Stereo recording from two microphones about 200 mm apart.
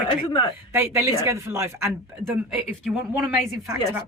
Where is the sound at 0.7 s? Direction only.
10° right (ahead or behind).